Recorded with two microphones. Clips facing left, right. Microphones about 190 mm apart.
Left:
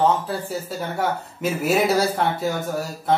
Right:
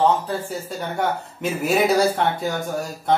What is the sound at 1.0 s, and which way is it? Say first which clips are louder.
A man's voice: even; centre (ahead or behind).